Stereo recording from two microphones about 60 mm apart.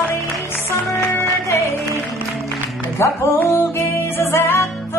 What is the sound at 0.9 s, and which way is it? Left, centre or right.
Music, left.